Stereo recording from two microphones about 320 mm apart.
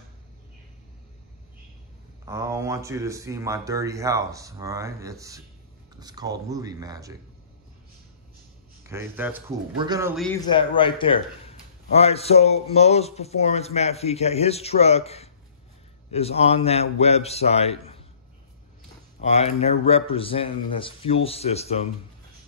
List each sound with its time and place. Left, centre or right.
2.2 s speech: centre
8.8 s speech: centre
10.5 s a man's voice: centre
19.2 s speech: centre